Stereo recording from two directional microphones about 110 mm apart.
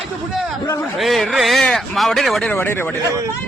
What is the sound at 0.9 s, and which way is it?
Speech, centre (ahead or behind).